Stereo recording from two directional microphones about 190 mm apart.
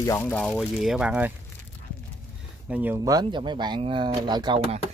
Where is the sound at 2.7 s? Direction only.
10° right (ahead or behind).